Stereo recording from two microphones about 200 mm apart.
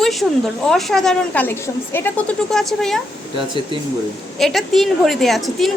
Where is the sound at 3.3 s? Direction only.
25° right (ahead or behind).